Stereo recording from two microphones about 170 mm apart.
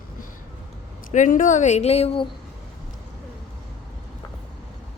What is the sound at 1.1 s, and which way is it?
Speech, 50° left (ahead or behind).